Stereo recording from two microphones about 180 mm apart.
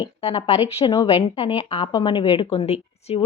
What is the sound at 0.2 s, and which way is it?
Speech, 35° left (ahead or behind).